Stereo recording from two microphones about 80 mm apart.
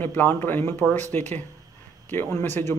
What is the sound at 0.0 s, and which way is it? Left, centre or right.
Speech, left.